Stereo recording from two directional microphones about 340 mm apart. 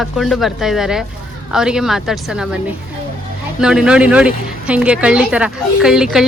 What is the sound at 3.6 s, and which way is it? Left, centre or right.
Speech, centre.